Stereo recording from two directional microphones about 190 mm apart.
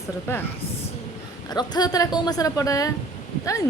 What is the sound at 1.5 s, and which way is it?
A woman's voice, 20° left (ahead or behind).